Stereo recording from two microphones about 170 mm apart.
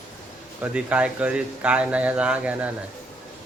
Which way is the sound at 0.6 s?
10° right (ahead or behind).